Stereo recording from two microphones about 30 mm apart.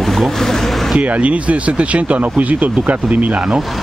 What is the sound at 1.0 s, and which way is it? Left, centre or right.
Speech, right.